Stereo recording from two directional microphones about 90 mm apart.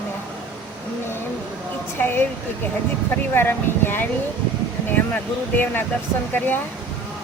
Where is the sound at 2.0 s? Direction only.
25° left (ahead or behind).